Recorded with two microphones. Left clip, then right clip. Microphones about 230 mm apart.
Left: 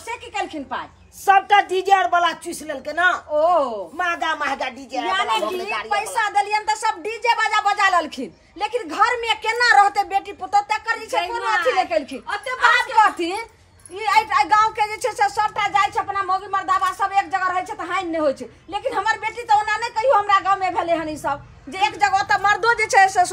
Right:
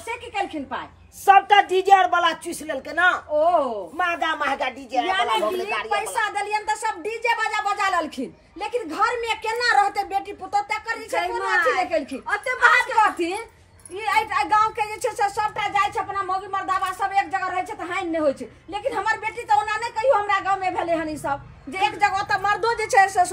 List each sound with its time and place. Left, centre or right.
0.1 s a woman's voice: centre
12.3 s a woman's voice: centre
13.0 s a woman's voice: centre